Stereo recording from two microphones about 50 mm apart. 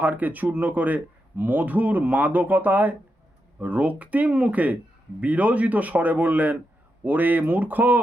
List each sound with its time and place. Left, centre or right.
0.0 s speech: right